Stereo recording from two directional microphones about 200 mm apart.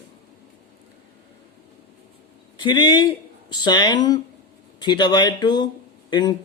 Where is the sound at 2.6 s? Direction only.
20° left (ahead or behind).